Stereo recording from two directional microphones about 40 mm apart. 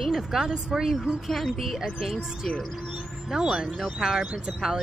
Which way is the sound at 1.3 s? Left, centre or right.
Centre.